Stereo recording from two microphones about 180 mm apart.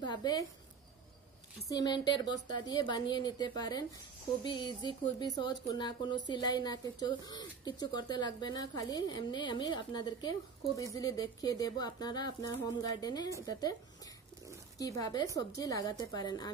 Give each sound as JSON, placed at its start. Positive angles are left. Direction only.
{"t": 0.0, "sound": "a woman's voice", "side_deg": 25}
{"t": 1.7, "sound": "speech", "side_deg": 20}
{"t": 14.8, "sound": "speech", "side_deg": 20}